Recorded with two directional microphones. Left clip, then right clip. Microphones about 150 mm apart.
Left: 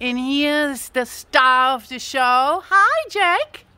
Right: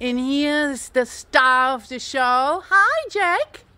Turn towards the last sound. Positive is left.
turn(degrees=0)  # may be behind; listen again after turning